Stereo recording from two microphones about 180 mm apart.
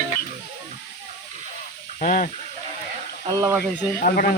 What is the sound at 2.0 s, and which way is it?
Speech, 45° left (ahead or behind).